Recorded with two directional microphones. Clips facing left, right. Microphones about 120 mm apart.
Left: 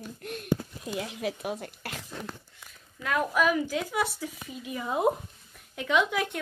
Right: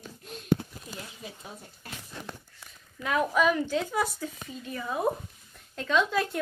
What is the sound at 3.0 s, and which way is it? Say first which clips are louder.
Speech: right 1 dB; centre (ahead or behind).